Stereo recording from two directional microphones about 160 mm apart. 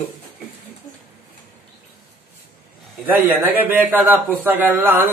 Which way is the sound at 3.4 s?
10° right (ahead or behind).